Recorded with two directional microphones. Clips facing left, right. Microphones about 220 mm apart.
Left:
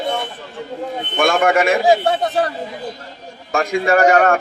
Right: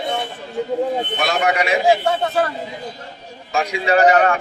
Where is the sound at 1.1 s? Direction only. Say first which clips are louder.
Left 4 dB; 50° left (ahead or behind).